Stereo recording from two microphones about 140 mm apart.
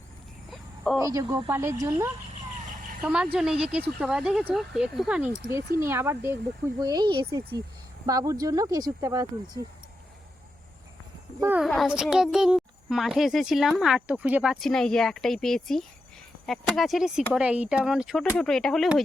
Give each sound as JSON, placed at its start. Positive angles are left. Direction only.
{"t": 0.9, "sound": "speech", "side_deg": -25}
{"t": 3.0, "sound": "speech", "side_deg": -5}
{"t": 5.8, "sound": "speech", "side_deg": -15}
{"t": 6.7, "sound": "speech", "side_deg": -30}
{"t": 11.3, "sound": "speech", "side_deg": -15}
{"t": 11.6, "sound": "a child's voice", "side_deg": 0}